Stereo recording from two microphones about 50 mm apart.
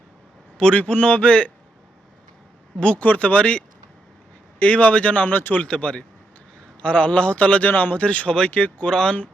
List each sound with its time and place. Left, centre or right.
0.5 s a man's voice: left
2.8 s a man's voice: left
4.6 s a man's voice: left
5.3 s speech: left
5.6 s a man's voice: left